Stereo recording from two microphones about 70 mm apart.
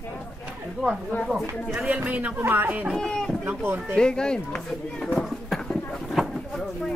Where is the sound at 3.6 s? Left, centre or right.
Right.